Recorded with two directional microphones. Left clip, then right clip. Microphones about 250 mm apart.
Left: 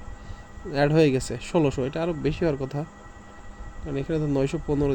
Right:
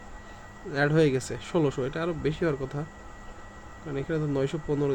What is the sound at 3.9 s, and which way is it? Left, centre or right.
Speech, centre.